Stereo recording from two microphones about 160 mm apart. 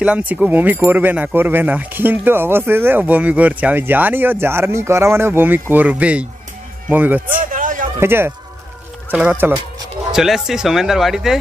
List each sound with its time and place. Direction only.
0.0 s speech: 10° right (ahead or behind)
7.5 s a sound: 55° right (ahead or behind)
8.0 s speech: 15° right (ahead or behind)